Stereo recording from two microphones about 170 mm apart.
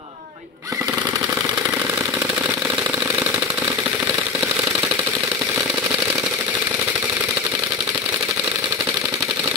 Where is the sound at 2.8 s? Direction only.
15° right (ahead or behind).